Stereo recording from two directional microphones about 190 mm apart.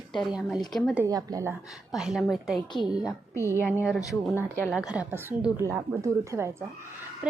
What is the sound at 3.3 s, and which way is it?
Speech, 15° left (ahead or behind).